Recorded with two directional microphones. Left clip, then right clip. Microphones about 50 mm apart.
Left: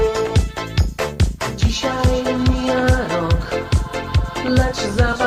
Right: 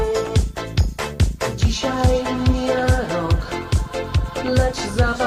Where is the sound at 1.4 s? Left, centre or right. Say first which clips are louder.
Left 1 dB; right.